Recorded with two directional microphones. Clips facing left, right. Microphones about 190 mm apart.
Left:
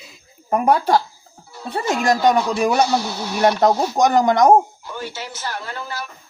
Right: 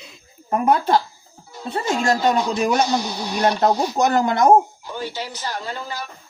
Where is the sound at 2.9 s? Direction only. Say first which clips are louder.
Left 1 dB; 15° right (ahead or behind).